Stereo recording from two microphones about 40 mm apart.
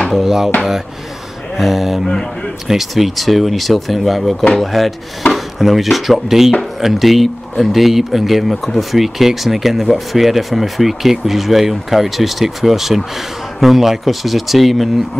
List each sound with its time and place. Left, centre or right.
0.1 s speech: centre
1.6 s speech: centre
2.0 s speech: centre
2.7 s speech: centre